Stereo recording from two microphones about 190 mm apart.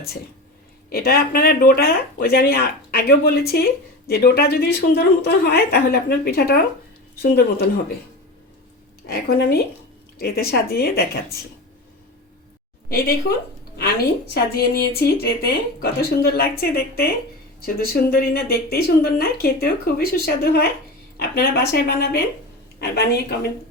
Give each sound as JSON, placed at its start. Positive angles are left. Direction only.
{"t": 0.9, "sound": "a woman's voice", "side_deg": 55}
{"t": 9.0, "sound": "a woman's voice", "side_deg": 55}
{"t": 13.7, "sound": "a woman's voice", "side_deg": 55}